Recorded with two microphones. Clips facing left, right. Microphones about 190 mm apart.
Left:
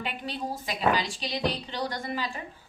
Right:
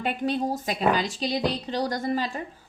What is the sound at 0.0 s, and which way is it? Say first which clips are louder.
Speech: right 8 dB; 45° right (ahead or behind).